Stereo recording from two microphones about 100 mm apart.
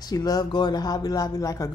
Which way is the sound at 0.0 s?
40° left (ahead or behind).